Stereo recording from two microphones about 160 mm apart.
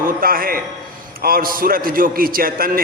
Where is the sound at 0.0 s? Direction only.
65° right (ahead or behind).